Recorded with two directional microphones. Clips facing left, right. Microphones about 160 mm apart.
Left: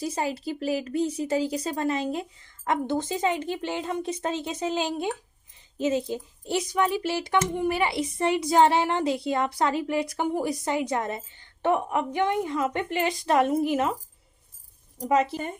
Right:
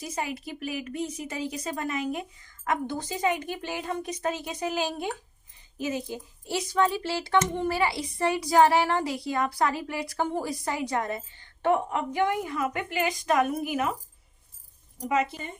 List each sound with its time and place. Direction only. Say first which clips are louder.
0.0 s a woman's voice: left 5 dB; 30° left (ahead or behind)
6.7 s child singing: right 1 dB; 15° left (ahead or behind)
7.8 s a woman's voice: left 1 dB; 20° left (ahead or behind)
14.9 s speech: left 4 dB; 35° left (ahead or behind)